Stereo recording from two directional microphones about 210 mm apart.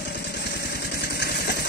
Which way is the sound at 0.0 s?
50° left (ahead or behind).